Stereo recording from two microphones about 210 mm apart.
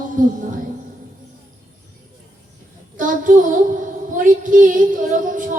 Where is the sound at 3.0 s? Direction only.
40° right (ahead or behind).